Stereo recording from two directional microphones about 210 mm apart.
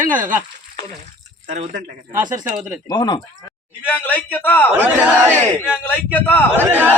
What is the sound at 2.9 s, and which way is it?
Speech, 20° left (ahead or behind).